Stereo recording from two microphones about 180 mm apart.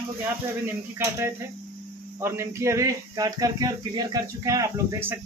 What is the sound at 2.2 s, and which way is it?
Speech, 15° right (ahead or behind).